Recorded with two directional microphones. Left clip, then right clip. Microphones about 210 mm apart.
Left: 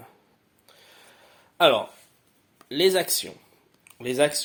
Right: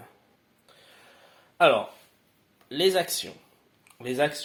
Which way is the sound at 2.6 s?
35° left (ahead or behind).